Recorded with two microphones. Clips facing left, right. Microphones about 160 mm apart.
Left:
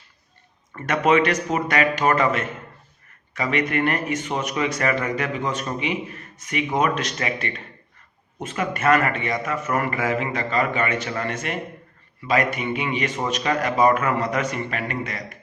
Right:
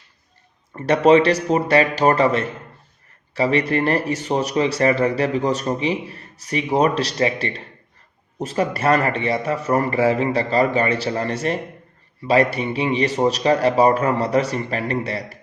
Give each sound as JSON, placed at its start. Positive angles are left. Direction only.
{"t": 0.7, "sound": "speech", "side_deg": -30}